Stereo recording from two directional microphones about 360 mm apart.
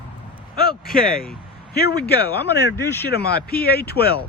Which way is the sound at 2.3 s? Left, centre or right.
Left.